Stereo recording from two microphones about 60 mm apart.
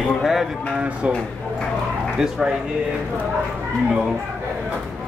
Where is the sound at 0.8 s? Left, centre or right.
Centre.